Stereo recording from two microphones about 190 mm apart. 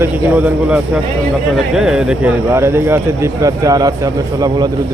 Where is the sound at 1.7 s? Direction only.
5° right (ahead or behind).